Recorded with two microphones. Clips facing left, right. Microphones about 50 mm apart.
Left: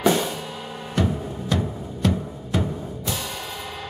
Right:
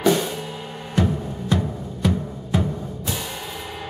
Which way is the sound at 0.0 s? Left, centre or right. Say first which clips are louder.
Right 1 dB; centre.